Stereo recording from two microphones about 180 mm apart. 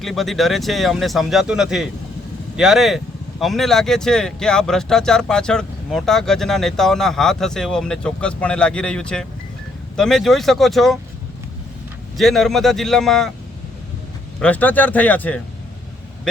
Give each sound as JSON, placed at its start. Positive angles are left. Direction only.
{"t": 0.0, "sound": "speech", "side_deg": 0}
{"t": 12.1, "sound": "speech", "side_deg": 0}
{"t": 14.3, "sound": "speech", "side_deg": 5}